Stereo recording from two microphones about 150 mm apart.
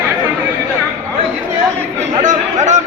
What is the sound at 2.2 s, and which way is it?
Chatter, 55° right (ahead or behind).